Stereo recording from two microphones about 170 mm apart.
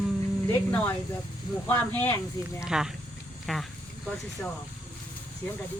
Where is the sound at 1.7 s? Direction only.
10° left (ahead or behind).